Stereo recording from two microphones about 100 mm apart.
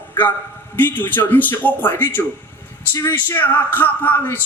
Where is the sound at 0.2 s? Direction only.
20° left (ahead or behind).